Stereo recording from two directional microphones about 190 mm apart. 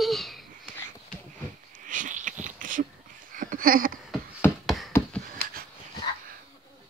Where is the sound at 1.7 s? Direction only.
45° right (ahead or behind).